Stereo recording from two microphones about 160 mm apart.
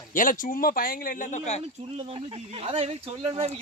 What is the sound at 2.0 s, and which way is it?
Speech, 35° right (ahead or behind).